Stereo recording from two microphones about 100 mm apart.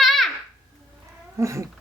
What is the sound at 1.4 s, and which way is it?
Cat, 30° right (ahead or behind).